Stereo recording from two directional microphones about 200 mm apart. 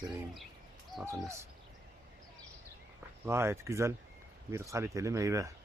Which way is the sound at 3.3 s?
15° right (ahead or behind).